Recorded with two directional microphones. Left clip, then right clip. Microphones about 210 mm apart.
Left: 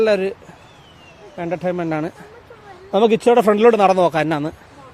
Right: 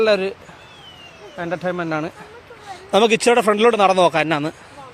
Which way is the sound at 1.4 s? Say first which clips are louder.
Left 1 dB; 25° left (ahead or behind).